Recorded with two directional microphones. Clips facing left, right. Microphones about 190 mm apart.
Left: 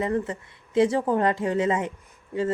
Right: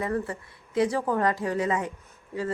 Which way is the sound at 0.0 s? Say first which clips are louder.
Left 3 dB; 25° left (ahead or behind).